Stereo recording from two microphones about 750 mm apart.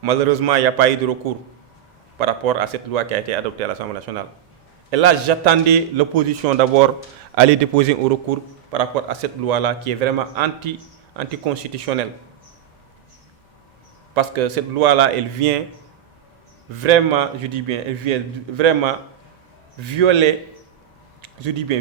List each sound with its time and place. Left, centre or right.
0.0 s a man's voice: right
8.3 s a man's voice: right
14.2 s a man's voice: right
16.8 s a man's voice: right
21.2 s a sound: right